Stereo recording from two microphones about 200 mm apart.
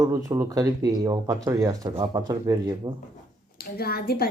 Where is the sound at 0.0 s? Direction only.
15° right (ahead or behind).